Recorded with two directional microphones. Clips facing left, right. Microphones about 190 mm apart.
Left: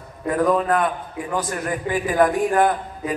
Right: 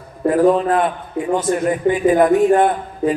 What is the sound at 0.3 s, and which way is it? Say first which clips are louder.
A man's voice: right 5 dB; 30° right (ahead or behind).